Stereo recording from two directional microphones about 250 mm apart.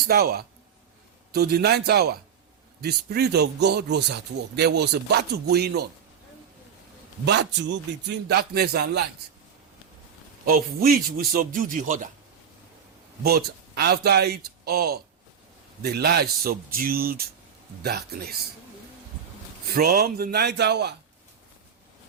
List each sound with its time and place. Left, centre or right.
0.1 s speech: right
7.3 s speech: right
10.4 s speech: right
13.2 s speech: right
19.7 s speech: right